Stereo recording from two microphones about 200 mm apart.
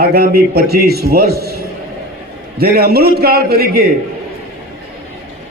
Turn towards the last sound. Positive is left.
turn(degrees=-50)  # may be behind; listen again after turning